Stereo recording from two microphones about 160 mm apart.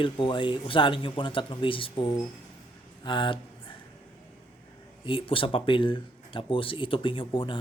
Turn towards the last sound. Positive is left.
turn(degrees=35)  # may be behind; listen again after turning